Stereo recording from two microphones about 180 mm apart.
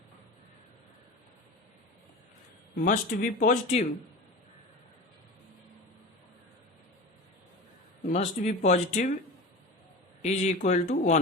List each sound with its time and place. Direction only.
2.8 s speech: 50° left (ahead or behind)
8.1 s speech: 40° left (ahead or behind)
10.2 s speech: 40° left (ahead or behind)